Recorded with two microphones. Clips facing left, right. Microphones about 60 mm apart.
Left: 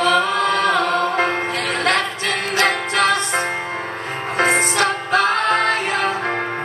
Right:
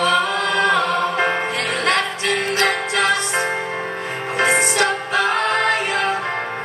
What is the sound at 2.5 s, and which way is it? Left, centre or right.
Music, left.